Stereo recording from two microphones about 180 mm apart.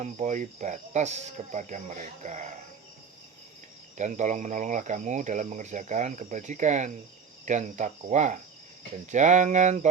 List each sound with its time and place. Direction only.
0.0 s speech: 40° right (ahead or behind)
3.9 s speech: 40° right (ahead or behind)